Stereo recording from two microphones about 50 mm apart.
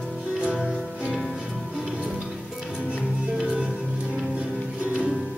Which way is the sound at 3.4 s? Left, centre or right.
Right.